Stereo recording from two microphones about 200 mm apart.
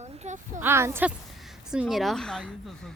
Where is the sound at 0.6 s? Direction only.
10° right (ahead or behind).